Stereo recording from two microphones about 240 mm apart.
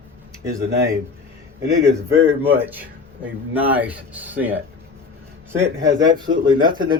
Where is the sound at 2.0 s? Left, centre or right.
Centre.